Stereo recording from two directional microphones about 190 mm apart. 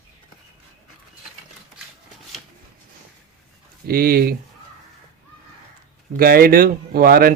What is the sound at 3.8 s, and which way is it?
Speech, 50° right (ahead or behind).